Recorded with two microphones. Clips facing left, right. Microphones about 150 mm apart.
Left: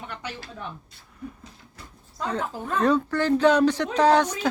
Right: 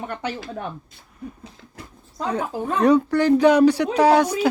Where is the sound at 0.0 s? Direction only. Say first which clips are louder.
Right 8 dB; 50° right (ahead or behind).